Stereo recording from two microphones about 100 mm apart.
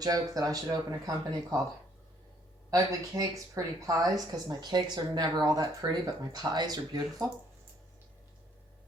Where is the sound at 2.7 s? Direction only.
35° right (ahead or behind).